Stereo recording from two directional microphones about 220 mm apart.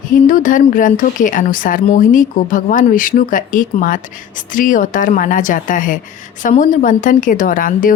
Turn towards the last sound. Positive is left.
turn(degrees=40)  # may be behind; listen again after turning